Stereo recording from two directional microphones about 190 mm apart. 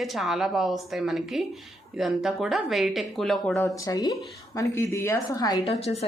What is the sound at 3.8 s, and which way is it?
Speech, 20° left (ahead or behind).